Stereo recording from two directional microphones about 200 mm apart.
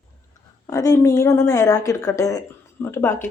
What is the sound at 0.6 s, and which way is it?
Speech, 15° left (ahead or behind).